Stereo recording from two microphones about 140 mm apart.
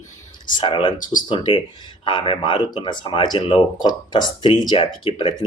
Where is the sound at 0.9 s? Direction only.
70° left (ahead or behind).